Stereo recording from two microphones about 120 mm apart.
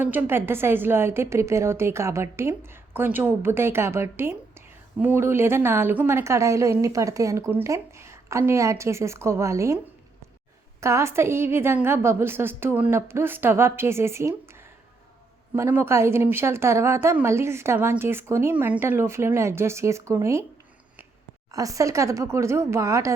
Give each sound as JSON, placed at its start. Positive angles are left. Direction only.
{"t": 0.0, "sound": "a woman's voice", "side_deg": -15}
{"t": 10.8, "sound": "a woman's voice", "side_deg": -25}
{"t": 15.5, "sound": "a woman's voice", "side_deg": -20}
{"t": 21.5, "sound": "a woman's voice", "side_deg": -30}